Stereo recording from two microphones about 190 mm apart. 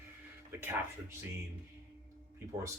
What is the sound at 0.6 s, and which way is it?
Speech, 10° right (ahead or behind).